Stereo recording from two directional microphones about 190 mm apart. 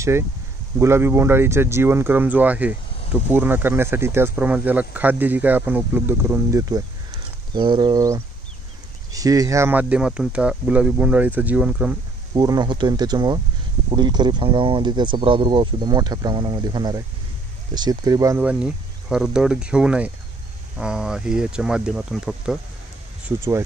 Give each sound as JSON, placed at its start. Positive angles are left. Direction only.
{"t": 0.7, "sound": "speech", "side_deg": -15}
{"t": 12.4, "sound": "speech", "side_deg": -20}
{"t": 18.4, "sound": "speech", "side_deg": -5}
{"t": 23.2, "sound": "speech", "side_deg": -15}